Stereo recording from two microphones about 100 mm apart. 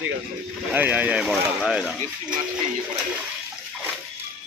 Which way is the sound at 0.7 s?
15° right (ahead or behind).